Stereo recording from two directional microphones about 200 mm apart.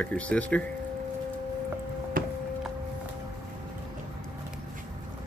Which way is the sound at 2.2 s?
45° right (ahead or behind).